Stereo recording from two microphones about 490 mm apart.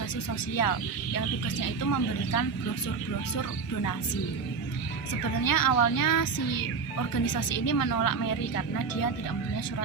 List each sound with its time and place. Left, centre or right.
0.5 s a woman's voice: left
5.4 s a woman's voice: left